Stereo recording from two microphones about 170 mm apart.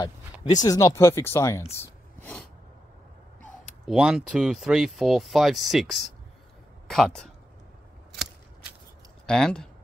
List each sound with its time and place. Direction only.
0.6 s speech: 20° left (ahead or behind)
1.8 s a sound: 10° left (ahead or behind)
3.8 s speech: 5° right (ahead or behind)
9.2 s speech: 5° left (ahead or behind)